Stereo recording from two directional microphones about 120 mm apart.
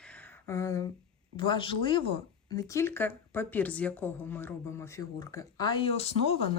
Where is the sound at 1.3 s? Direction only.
45° left (ahead or behind).